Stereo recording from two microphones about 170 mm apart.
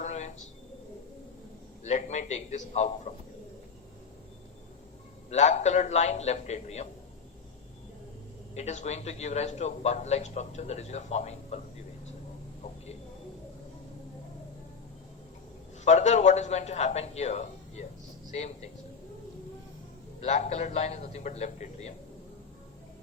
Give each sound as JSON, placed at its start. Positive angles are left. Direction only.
{"t": 0.0, "sound": "a sound", "side_deg": 45}
{"t": 1.8, "sound": "a man's voice", "side_deg": 45}
{"t": 5.3, "sound": "a man's voice", "side_deg": 45}
{"t": 8.5, "sound": "a man's voice", "side_deg": 45}
{"t": 15.8, "sound": "a man's voice", "side_deg": 40}
{"t": 20.2, "sound": "a man's voice", "side_deg": 40}